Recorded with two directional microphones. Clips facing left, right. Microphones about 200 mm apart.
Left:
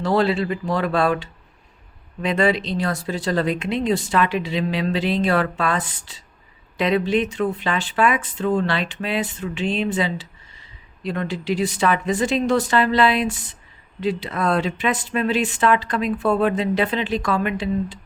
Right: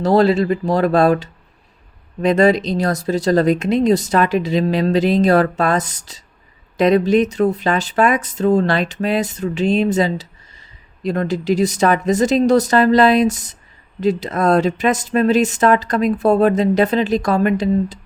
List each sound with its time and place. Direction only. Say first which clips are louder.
0.0 s speech: right 6 dB; 40° right (ahead or behind)